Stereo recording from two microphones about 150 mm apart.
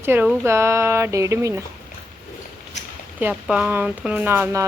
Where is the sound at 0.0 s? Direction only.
15° right (ahead or behind).